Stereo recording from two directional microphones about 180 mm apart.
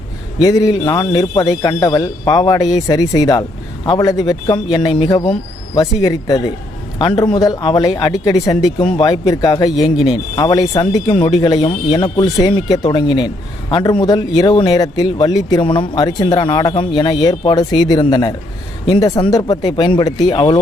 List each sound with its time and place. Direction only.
0.4 s speech: 20° left (ahead or behind)